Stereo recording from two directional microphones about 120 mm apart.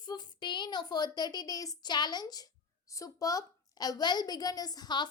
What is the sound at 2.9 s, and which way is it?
A woman's voice, 30° left (ahead or behind).